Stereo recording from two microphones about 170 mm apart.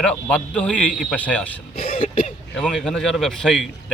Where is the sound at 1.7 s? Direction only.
55° left (ahead or behind).